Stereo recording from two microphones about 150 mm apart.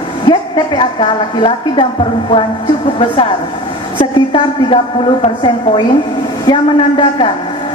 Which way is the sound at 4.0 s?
35° left (ahead or behind).